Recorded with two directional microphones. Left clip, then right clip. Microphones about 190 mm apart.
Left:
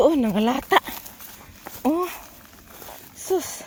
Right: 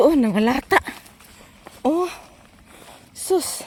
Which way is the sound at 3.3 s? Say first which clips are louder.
Right 3 dB; 40° right (ahead or behind).